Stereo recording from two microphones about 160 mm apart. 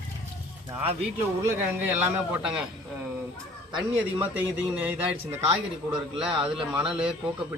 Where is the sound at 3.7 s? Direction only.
10° right (ahead or behind).